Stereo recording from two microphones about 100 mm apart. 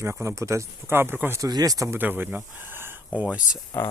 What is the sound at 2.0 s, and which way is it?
Speech, 20° right (ahead or behind).